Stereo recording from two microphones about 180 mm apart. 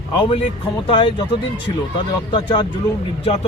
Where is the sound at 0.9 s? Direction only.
25° left (ahead or behind).